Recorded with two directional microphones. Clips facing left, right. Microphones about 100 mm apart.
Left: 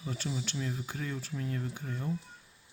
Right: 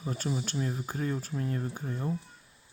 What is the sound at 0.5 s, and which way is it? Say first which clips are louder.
Speech: right 4 dB; 35° right (ahead or behind).